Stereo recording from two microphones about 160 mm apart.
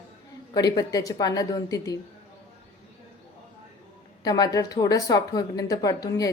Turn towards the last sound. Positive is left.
turn(degrees=25)  # may be behind; listen again after turning